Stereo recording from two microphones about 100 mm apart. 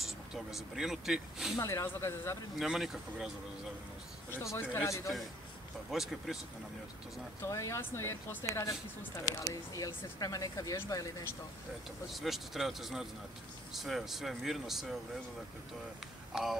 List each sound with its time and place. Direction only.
0.0 s speech: 5° right (ahead or behind)
1.6 s speech: 30° left (ahead or behind)
2.6 s speech: 5° right (ahead or behind)
4.3 s speech: 25° left (ahead or behind)
5.9 s speech: centre (ahead or behind)
7.4 s speech: 30° left (ahead or behind)
9.2 s speech: 35° left (ahead or behind)
12.1 s speech: centre (ahead or behind)
16.3 s speech: 5° right (ahead or behind)